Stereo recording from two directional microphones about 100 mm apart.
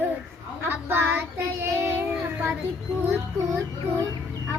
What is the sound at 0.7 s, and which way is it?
A child's voice, 20° right (ahead or behind).